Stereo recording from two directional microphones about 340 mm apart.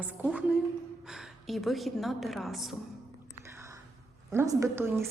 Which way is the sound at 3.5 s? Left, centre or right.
Centre.